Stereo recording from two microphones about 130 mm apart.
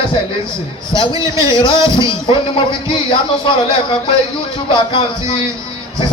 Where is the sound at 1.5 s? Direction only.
40° left (ahead or behind).